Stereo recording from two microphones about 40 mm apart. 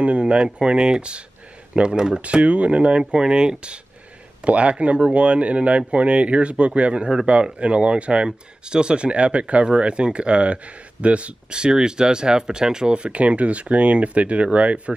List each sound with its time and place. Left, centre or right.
0.0 s speech: right
2.2 s speech: right
3.0 s speech: centre; by 15.0 s right